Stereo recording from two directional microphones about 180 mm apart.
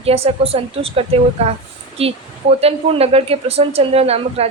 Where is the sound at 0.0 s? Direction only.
35° right (ahead or behind).